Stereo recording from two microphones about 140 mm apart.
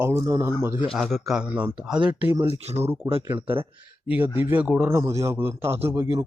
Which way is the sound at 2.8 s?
20° right (ahead or behind).